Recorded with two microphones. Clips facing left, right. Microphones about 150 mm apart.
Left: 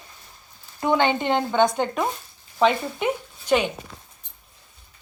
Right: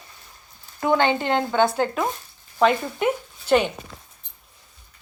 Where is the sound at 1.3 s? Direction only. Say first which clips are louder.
Even; 5° left (ahead or behind).